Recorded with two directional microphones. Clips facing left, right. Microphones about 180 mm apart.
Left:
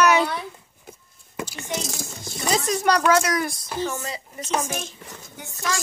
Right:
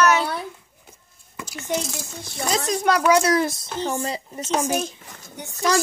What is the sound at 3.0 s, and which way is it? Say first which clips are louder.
A child's voice: right 2 dB; 15° right (ahead or behind).